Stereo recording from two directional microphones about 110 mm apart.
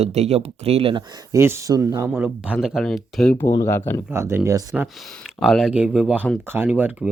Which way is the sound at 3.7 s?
25° left (ahead or behind).